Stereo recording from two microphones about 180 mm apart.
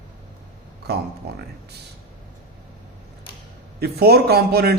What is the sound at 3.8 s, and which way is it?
Speech, 60° right (ahead or behind).